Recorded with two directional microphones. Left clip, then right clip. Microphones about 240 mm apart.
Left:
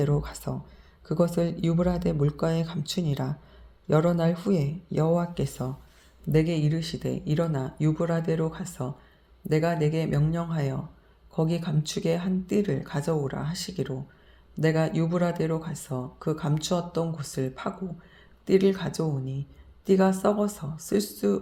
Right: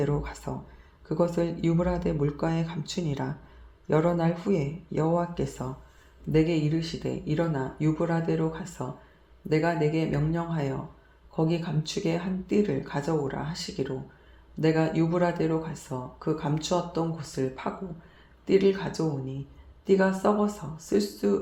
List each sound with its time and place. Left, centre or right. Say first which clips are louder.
0.0 s speech: left 1 dB; left